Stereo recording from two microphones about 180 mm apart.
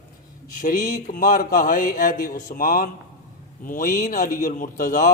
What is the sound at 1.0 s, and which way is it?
A man's voice, 45° left (ahead or behind).